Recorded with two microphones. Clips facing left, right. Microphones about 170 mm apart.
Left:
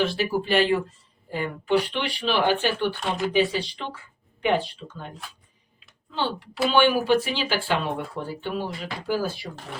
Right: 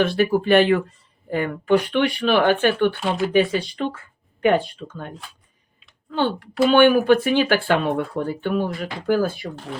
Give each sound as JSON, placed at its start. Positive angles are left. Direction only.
{"t": 0.0, "sound": "speech", "side_deg": -55}